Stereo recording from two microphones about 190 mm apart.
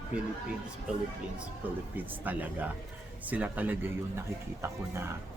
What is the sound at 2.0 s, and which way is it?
Speech, 10° right (ahead or behind).